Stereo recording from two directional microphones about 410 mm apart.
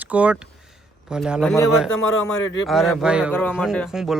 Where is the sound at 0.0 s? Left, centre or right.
Centre.